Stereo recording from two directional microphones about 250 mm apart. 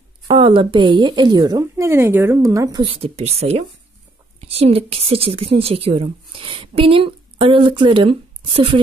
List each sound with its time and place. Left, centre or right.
0.3 s a woman's voice: right